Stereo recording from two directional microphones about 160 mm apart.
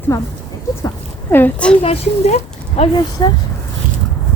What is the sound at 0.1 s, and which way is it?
Speech, 20° left (ahead or behind).